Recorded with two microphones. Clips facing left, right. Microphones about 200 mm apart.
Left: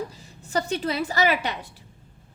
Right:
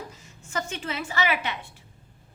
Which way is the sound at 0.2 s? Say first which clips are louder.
Left 3 dB; 35° left (ahead or behind).